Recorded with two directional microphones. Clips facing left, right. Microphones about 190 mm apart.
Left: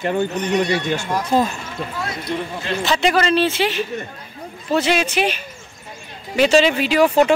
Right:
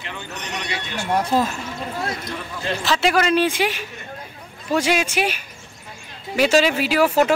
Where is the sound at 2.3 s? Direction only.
20° left (ahead or behind).